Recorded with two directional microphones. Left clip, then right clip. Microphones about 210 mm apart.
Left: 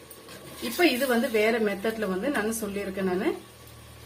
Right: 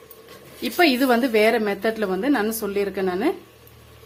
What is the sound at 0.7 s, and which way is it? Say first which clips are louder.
A woman's voice: right 5 dB; 50° right (ahead or behind).